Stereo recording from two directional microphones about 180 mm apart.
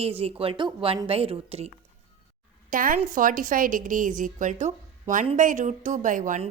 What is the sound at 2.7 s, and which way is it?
A woman's voice, 50° right (ahead or behind).